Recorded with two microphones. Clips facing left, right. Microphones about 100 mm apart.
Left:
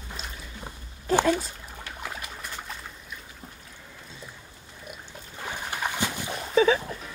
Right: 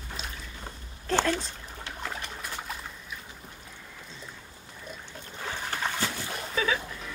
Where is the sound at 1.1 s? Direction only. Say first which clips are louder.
Left 4 dB; 10° left (ahead or behind).